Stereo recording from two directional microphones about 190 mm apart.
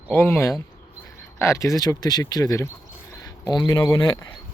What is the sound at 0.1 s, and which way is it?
A man's voice, 10° left (ahead or behind).